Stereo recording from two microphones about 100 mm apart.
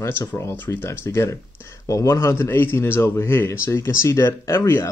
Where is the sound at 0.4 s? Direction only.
25° left (ahead or behind).